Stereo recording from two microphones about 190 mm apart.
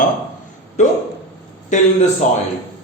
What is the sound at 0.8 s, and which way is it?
Speech, 40° left (ahead or behind).